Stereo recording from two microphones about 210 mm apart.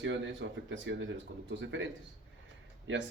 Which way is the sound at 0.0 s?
65° right (ahead or behind).